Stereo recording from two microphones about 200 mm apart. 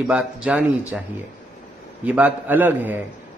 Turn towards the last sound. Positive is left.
turn(degrees=-10)  # may be behind; listen again after turning